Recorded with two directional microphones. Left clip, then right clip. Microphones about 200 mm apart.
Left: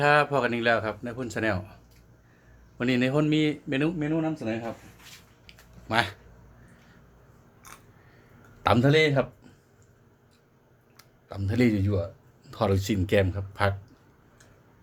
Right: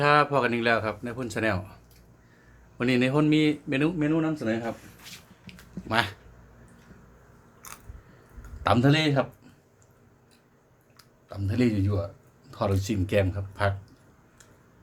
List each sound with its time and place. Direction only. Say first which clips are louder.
0.0 s a man's voice: even; 5° left (ahead or behind)
5.5 s a sound: even; 15° left (ahead or behind)
7.6 s biting: right 3 dB; 40° right (ahead or behind)
8.6 s speech: left 2 dB; 30° left (ahead or behind)
10.9 s speech: left 1 dB; 35° left (ahead or behind)